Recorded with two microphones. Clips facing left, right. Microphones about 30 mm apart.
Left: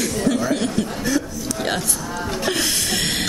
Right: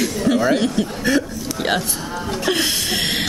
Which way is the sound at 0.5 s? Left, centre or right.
Centre.